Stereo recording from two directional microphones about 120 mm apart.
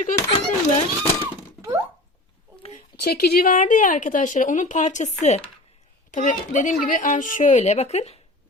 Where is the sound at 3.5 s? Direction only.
90° left.